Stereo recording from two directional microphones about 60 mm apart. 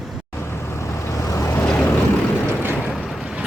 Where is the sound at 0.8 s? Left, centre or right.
Left.